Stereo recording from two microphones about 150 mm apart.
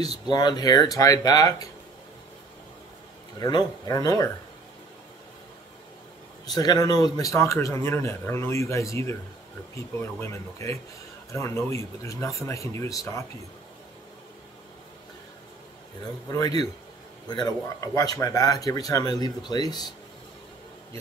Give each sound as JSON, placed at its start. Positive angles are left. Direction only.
{"t": 0.3, "sound": "a man's voice", "side_deg": 30}
{"t": 3.3, "sound": "a man's voice", "side_deg": 25}
{"t": 6.4, "sound": "a man's voice", "side_deg": 25}
{"t": 16.3, "sound": "a man's voice", "side_deg": 25}